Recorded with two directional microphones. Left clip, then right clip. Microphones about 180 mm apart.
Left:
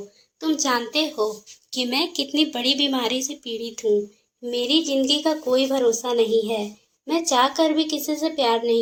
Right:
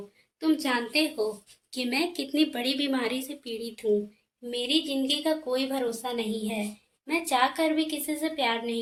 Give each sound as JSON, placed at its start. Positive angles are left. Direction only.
{"t": 0.6, "sound": "a woman's voice", "side_deg": 15}